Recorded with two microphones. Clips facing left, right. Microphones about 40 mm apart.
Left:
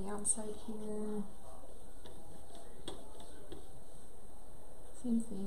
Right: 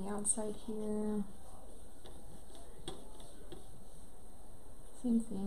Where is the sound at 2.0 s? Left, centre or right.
Centre.